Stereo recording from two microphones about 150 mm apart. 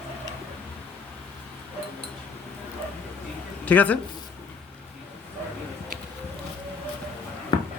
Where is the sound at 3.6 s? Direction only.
10° left (ahead or behind).